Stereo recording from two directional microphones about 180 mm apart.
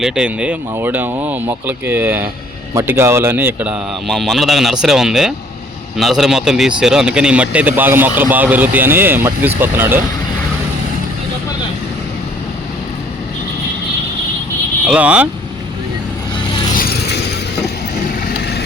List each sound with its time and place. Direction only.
0.0 s speech: 5° right (ahead or behind)
14.8 s speech: 5° right (ahead or behind)
16.7 s vehicle: 60° left (ahead or behind)
18.3 s vehicle: 60° left (ahead or behind)